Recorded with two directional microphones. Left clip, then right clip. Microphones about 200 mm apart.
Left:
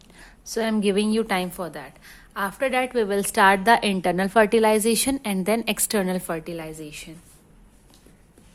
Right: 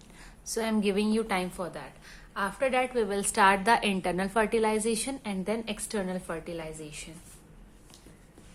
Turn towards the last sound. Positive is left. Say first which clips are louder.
# left 4 dB
turn(degrees=40)  # may be behind; listen again after turning